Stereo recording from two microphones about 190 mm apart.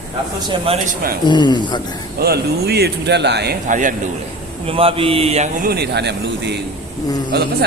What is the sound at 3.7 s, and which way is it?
Speech, 40° right (ahead or behind).